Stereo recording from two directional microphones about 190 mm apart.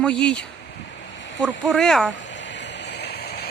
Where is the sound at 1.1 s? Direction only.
70° left (ahead or behind).